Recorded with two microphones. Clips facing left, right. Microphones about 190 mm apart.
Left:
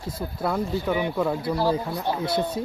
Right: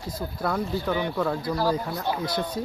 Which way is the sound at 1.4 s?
25° left (ahead or behind).